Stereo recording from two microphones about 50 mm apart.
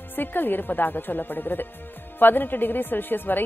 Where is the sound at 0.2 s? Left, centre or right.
Left.